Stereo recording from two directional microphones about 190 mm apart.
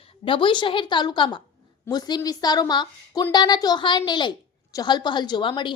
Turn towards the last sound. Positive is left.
turn(degrees=25)  # may be behind; listen again after turning